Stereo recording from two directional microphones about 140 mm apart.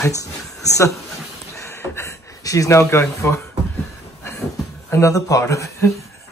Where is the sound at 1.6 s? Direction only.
20° left (ahead or behind).